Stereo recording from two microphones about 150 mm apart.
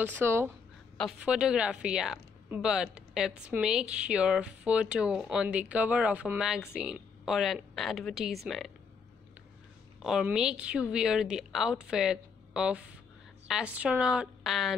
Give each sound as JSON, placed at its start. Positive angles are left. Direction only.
{"t": 0.0, "sound": "speech", "side_deg": -15}
{"t": 1.2, "sound": "speech", "side_deg": -5}
{"t": 10.0, "sound": "speech", "side_deg": -5}